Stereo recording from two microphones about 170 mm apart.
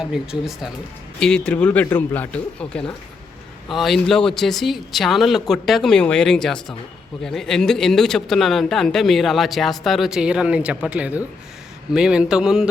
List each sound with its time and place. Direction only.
0.0 s speech: 5° right (ahead or behind)